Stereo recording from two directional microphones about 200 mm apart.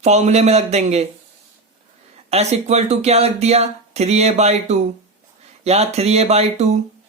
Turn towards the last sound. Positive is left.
turn(degrees=-35)  # may be behind; listen again after turning